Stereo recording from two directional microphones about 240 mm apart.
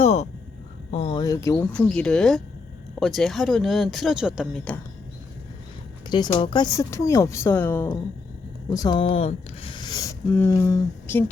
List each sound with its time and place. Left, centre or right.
0.0 s a sound: left
0.9 s speech: left; by 4.8 s centre
6.1 s speech: centre